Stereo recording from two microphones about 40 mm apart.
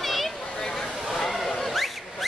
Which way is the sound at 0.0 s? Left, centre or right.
Centre.